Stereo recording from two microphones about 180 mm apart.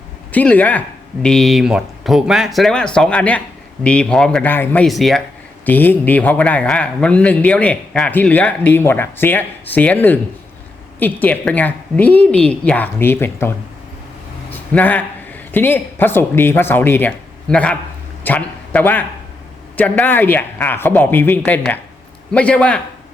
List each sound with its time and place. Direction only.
0.3 s a man's voice: 10° left (ahead or behind)
14.7 s a man's voice: 10° left (ahead or behind)